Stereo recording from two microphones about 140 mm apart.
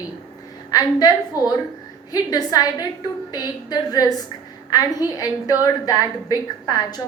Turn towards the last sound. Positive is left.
turn(degrees=30)  # may be behind; listen again after turning